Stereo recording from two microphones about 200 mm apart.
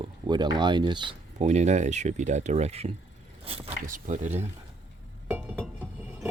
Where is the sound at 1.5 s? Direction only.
35° right (ahead or behind).